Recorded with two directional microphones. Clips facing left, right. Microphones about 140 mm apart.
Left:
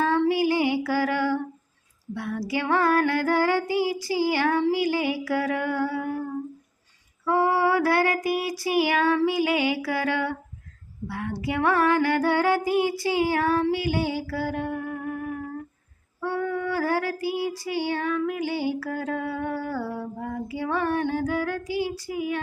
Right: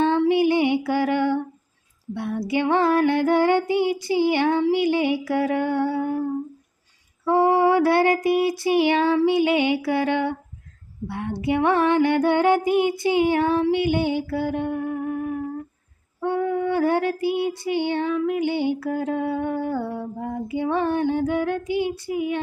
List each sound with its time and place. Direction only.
0.3 s music: 25° right (ahead or behind)
2.1 s female singing: 25° right (ahead or behind)
7.3 s female singing: 25° right (ahead or behind)
16.2 s female singing: 25° right (ahead or behind)